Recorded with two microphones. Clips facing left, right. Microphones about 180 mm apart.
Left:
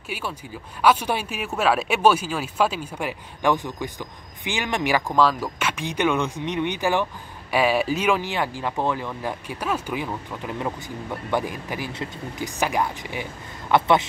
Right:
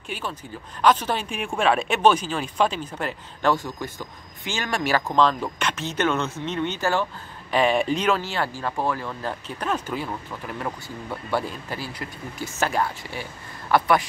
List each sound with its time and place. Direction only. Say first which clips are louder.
0.1 s speech: left 1 dB; 10° left (ahead or behind)
5.1 s speech: even; 5° left (ahead or behind); by 14.0 s 20° left (ahead or behind)